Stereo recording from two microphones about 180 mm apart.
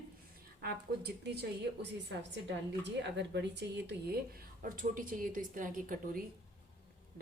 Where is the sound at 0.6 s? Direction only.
60° right (ahead or behind).